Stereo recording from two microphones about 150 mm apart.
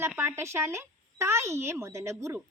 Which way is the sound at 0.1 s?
15° right (ahead or behind).